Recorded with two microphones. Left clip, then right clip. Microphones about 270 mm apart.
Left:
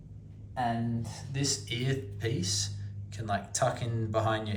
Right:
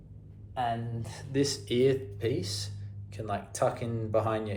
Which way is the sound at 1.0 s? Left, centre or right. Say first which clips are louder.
Right 5 dB; right.